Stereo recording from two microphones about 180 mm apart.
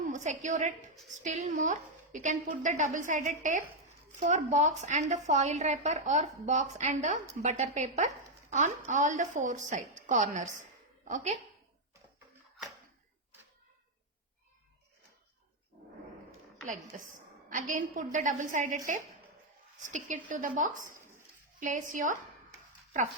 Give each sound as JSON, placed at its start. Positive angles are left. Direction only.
{"t": 0.0, "sound": "a woman's voice", "side_deg": -40}
{"t": 16.6, "sound": "a woman's voice", "side_deg": -45}
{"t": 19.9, "sound": "a woman's voice", "side_deg": -45}